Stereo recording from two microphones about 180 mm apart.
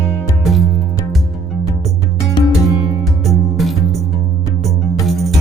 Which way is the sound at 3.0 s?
Centre (ahead or behind).